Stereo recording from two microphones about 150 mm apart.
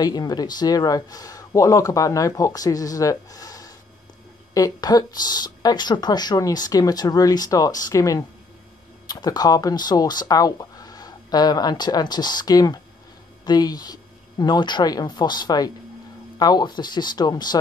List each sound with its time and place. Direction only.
0.0 s speech: 25° left (ahead or behind)